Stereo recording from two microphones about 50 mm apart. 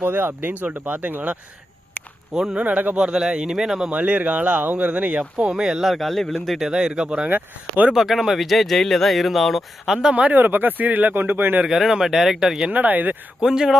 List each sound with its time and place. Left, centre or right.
0.0 s speech: right
2.3 s speech: centre
2.6 s speech: right
3.0 s speech: centre
3.9 s speech: right
5.5 s speech: centre
5.9 s speech: centre
6.7 s speech: centre
7.3 s speech: right
7.9 s speech: centre
10.3 s speech: right
11.7 s speech: centre
12.7 s speech: right
13.4 s speech: centre